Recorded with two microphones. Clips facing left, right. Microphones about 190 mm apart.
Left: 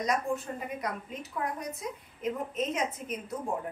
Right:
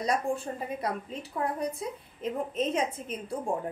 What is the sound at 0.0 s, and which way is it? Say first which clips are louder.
A woman's voice: right 1 dB; 30° right (ahead or behind).